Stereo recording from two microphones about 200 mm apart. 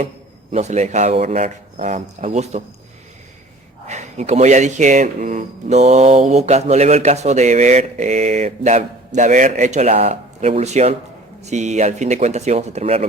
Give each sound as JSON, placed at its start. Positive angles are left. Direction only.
{"t": 0.5, "sound": "speech", "side_deg": -35}
{"t": 3.8, "sound": "speech", "side_deg": -35}